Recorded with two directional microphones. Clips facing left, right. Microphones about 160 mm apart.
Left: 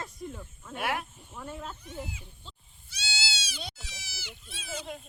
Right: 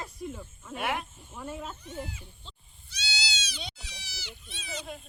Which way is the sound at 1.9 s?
5° left (ahead or behind).